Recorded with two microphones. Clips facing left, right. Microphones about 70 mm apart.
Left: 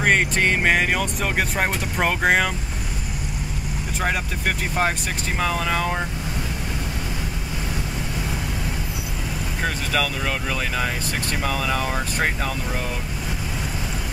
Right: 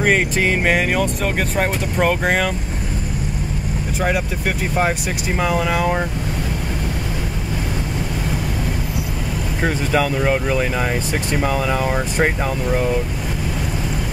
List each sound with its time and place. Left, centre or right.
0.0 s speech: centre
4.0 s speech: centre
9.6 s speech: right